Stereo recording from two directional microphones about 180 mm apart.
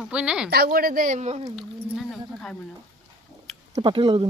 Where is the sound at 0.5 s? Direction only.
60° right (ahead or behind); by 1.4 s 40° right (ahead or behind).